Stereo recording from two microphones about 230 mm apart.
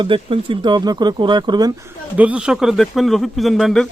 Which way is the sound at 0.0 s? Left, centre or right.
Right.